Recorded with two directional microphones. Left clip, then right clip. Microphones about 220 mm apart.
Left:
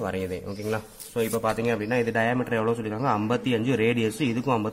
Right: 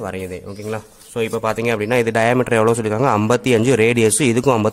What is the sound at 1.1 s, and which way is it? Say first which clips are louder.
A man's voice: right 6 dB; 30° right (ahead or behind).